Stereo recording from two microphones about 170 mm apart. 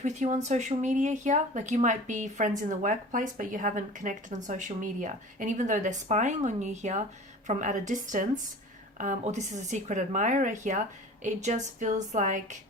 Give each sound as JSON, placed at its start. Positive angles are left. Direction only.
{"t": 0.0, "sound": "speech", "side_deg": -45}